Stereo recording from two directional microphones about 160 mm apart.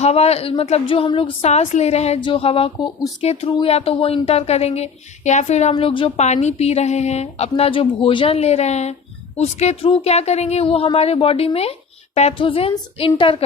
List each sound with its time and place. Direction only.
0.0 s a woman's voice: 40° left (ahead or behind)
5.7 s a woman's voice: 30° left (ahead or behind)
6.1 s a woman's voice: 45° left (ahead or behind)